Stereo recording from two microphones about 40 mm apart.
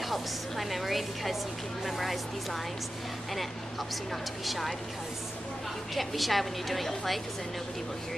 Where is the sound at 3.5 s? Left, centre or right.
Centre.